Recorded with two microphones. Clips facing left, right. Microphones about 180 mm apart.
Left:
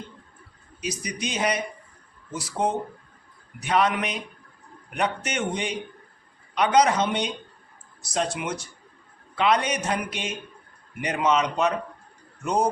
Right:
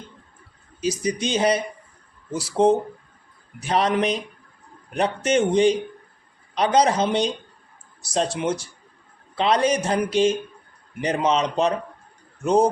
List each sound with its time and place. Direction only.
0.8 s a man's voice: 30° right (ahead or behind)